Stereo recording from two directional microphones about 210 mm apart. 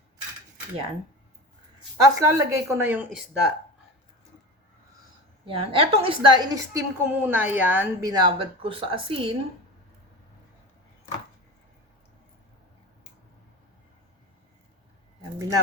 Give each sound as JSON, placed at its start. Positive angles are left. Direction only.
{"t": 2.0, "sound": "speech", "side_deg": -15}
{"t": 5.5, "sound": "a woman's voice", "side_deg": -25}
{"t": 15.4, "sound": "speech", "side_deg": -15}